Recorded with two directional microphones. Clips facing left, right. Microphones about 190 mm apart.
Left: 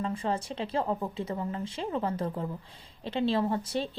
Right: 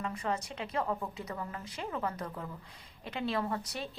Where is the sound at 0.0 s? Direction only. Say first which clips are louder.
Left 4 dB; 30° left (ahead or behind).